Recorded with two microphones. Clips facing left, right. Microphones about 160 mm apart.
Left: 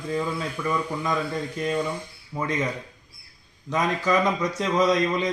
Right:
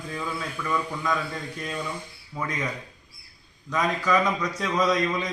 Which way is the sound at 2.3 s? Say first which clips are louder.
Left 4 dB; 25° left (ahead or behind).